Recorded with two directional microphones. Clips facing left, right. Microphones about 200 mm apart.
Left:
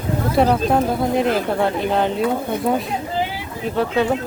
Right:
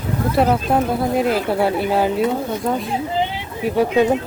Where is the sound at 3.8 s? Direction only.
15° right (ahead or behind).